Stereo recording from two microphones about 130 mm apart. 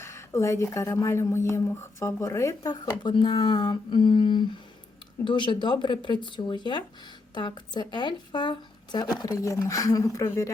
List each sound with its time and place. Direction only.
0.0 s speech: 20° left (ahead or behind)